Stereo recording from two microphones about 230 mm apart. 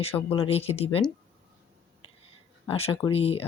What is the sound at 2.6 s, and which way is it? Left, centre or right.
Speech, left.